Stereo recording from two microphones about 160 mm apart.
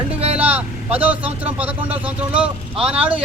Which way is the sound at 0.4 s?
10° right (ahead or behind).